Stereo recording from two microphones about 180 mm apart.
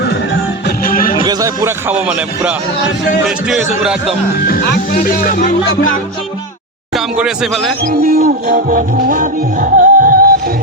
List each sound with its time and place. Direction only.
0.9 s music: 50° left (ahead or behind)
1.2 s speech: 20° right (ahead or behind)
1.9 s speech: 10° right (ahead or behind)
4.3 s speech: 55° left (ahead or behind)
4.9 s music: 50° left (ahead or behind)
6.9 s speech: centre (ahead or behind)
7.9 s music: 55° right (ahead or behind)